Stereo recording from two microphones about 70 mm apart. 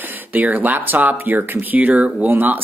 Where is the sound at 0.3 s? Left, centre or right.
Right.